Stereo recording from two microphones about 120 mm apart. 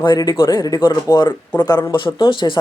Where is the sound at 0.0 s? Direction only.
35° left (ahead or behind).